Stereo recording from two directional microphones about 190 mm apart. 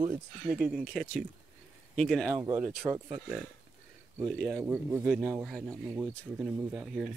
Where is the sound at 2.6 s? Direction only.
5° right (ahead or behind).